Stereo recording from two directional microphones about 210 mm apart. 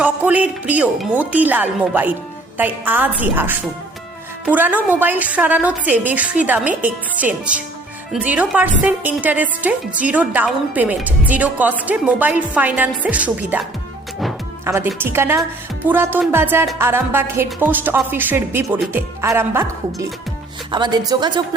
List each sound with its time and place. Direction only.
0.0 s a woman's voice: 5° right (ahead or behind)
14.6 s a woman's voice: 10° right (ahead or behind)